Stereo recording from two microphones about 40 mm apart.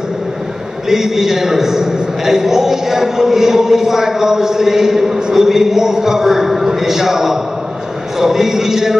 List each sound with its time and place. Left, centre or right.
0.8 s a man's voice: centre